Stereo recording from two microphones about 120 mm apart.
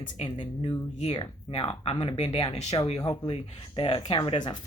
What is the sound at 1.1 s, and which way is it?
Speech, 45° left (ahead or behind).